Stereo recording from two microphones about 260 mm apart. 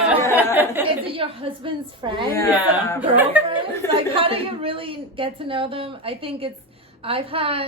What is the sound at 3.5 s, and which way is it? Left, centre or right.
A woman's voice, centre.